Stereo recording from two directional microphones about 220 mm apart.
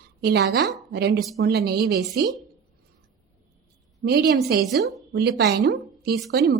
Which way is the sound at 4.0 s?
50° right (ahead or behind).